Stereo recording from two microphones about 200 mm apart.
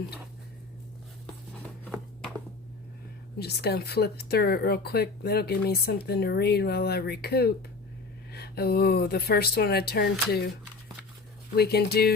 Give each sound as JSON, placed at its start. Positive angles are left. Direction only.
{"t": 3.3, "sound": "speech", "side_deg": 55}
{"t": 11.5, "sound": "speech", "side_deg": 55}